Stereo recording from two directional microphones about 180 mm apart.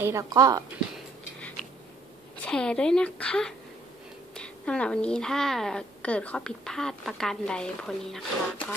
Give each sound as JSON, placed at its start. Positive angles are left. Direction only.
{"t": 0.0, "sound": "speech", "side_deg": -15}
{"t": 2.4, "sound": "a woman's voice", "side_deg": 5}